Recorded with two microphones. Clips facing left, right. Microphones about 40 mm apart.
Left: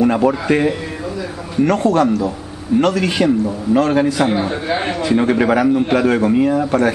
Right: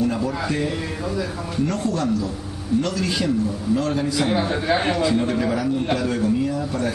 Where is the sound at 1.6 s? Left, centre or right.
Left.